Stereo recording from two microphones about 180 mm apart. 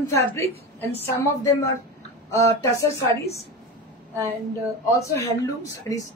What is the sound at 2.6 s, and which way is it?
Speech, 15° left (ahead or behind).